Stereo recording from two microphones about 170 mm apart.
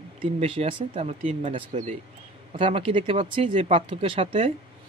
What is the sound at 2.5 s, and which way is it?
Speech, 35° right (ahead or behind).